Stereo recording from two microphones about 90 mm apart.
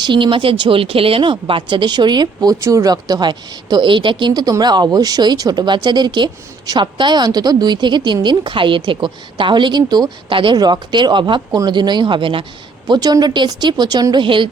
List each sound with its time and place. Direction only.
0.0 s a woman's voice: 65° right (ahead or behind)
2.6 s speech: 35° right (ahead or behind); by 10.3 s 50° right (ahead or behind)
10.3 s speech: 70° right (ahead or behind)
10.6 s a woman's voice: 55° right (ahead or behind); by 12.5 s 75° right (ahead or behind)
12.9 s speech: 45° right (ahead or behind); by 14.4 s 65° right (ahead or behind)